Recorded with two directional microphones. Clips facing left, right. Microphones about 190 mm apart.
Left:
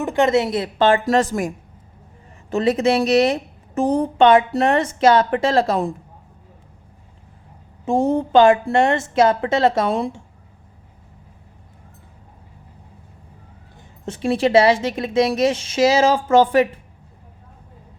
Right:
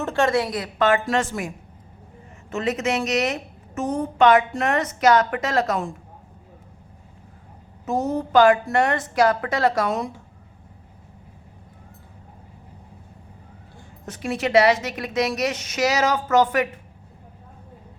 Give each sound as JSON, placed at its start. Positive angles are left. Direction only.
{"t": 0.0, "sound": "a woman's voice", "side_deg": 15}
{"t": 7.9, "sound": "a woman's voice", "side_deg": 30}
{"t": 13.7, "sound": "a woman's voice", "side_deg": 25}